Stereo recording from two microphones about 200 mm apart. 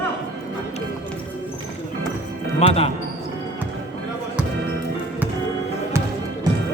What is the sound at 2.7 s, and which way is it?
Speech, 30° left (ahead or behind).